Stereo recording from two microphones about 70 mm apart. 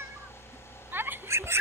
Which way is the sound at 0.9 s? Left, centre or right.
Right.